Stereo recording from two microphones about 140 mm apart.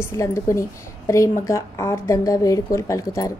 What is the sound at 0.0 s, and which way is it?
A woman's voice, 20° left (ahead or behind).